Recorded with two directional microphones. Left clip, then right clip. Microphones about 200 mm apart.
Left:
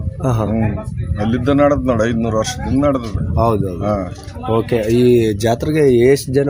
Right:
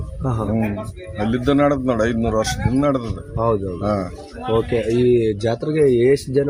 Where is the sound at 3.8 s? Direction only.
5° right (ahead or behind).